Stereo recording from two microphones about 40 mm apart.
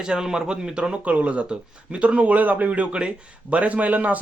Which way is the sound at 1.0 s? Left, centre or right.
Right.